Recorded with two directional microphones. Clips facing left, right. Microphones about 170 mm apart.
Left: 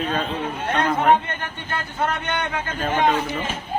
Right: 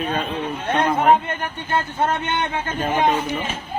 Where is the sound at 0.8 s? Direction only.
25° right (ahead or behind).